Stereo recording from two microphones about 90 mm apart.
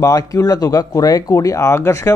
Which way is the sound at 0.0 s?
40° left (ahead or behind).